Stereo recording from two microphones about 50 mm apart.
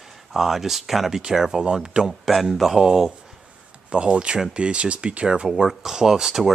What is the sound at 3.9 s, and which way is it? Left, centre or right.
Speech, right.